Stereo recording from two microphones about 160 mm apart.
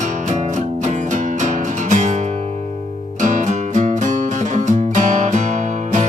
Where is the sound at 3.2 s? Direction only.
50° right (ahead or behind).